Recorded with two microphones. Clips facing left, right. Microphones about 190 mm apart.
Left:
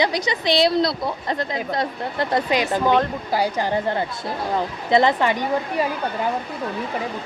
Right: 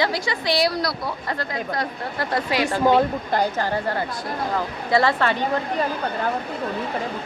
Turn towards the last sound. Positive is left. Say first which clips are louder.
# left 1 dB
turn(degrees=10)  # may be behind; listen again after turning